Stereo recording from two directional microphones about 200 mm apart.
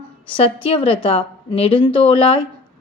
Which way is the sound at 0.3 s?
25° left (ahead or behind).